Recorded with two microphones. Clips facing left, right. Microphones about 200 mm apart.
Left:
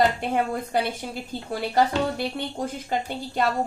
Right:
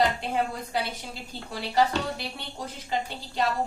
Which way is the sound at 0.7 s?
50° left (ahead or behind).